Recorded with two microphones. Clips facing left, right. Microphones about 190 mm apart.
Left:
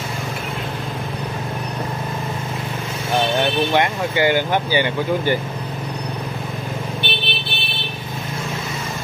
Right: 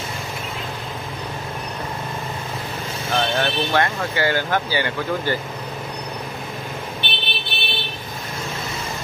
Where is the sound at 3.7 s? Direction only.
15° left (ahead or behind).